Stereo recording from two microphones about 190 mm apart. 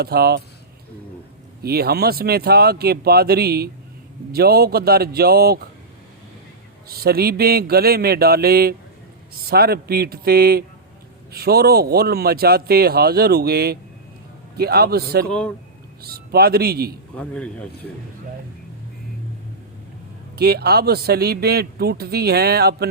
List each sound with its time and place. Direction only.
0.0 s a man's voice: 55° right (ahead or behind)
1.6 s a man's voice: 55° right (ahead or behind)
6.8 s a man's voice: 55° right (ahead or behind)
15.3 s speech: 5° left (ahead or behind)
16.0 s a man's voice: 55° right (ahead or behind)
17.2 s speech: 5° left (ahead or behind)
20.3 s a man's voice: 55° right (ahead or behind)